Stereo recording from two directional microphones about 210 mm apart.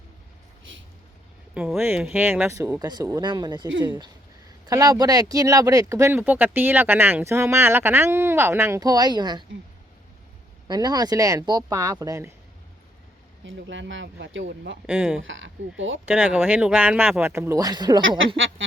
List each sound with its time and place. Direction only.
1.5 s speech: 5° right (ahead or behind); by 9.4 s 20° right (ahead or behind)
10.7 s speech: 20° right (ahead or behind)
13.4 s speech: 60° right (ahead or behind)
14.8 s speech: 5° right (ahead or behind)
15.2 s speech: 65° right (ahead or behind)
16.0 s speech: 5° right (ahead or behind)